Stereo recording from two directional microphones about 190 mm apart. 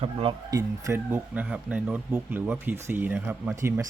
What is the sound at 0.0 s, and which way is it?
Speech, 30° right (ahead or behind).